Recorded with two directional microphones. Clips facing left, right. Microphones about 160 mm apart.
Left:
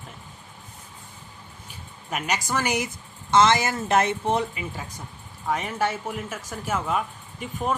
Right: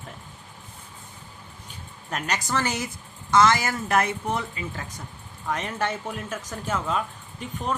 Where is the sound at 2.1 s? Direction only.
10° left (ahead or behind).